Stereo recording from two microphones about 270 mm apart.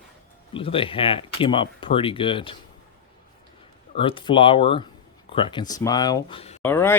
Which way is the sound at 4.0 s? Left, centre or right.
Centre.